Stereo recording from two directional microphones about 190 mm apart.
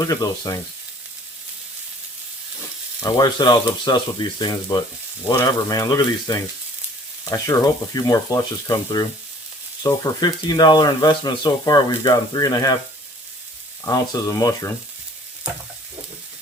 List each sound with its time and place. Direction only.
0.0 s speech: 20° left (ahead or behind)
3.0 s speech: 20° left (ahead or behind)
13.8 s speech: 20° left (ahead or behind)